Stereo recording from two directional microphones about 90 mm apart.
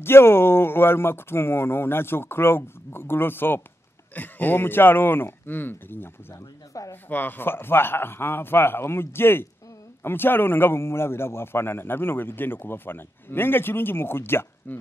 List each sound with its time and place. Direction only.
0.0 s a man's voice: 25° left (ahead or behind)